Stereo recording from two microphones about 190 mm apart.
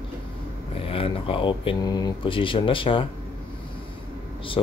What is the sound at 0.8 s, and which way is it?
Speech, 30° left (ahead or behind).